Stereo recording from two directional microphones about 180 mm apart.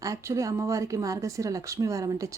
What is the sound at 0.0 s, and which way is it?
Speech, 15° right (ahead or behind).